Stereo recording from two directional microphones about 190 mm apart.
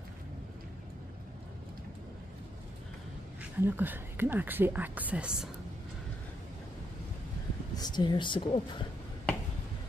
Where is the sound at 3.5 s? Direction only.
10° right (ahead or behind).